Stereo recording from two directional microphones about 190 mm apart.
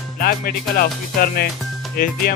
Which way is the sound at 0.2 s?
50° left (ahead or behind).